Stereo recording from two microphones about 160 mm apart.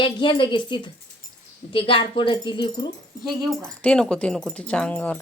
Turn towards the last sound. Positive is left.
turn(degrees=10)  # may be behind; listen again after turning